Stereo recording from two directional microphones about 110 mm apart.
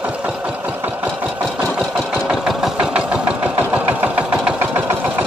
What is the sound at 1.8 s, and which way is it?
Engine, 10° right (ahead or behind).